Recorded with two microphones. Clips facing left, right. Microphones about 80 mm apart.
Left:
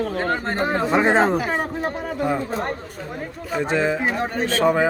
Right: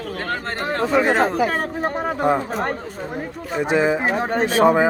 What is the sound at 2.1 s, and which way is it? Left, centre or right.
Speech, right.